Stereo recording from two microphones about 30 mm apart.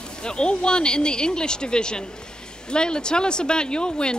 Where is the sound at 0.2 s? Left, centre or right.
Left.